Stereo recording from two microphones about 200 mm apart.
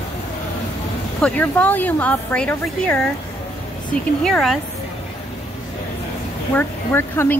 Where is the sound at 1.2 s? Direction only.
10° left (ahead or behind).